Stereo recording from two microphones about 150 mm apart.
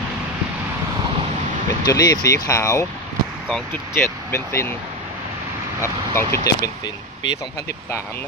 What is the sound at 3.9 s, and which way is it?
Speech, 15° left (ahead or behind).